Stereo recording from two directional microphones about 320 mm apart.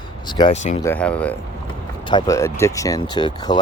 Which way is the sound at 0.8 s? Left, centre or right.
Centre.